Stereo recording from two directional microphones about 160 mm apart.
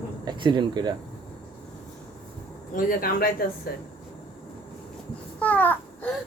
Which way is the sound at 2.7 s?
60° left (ahead or behind).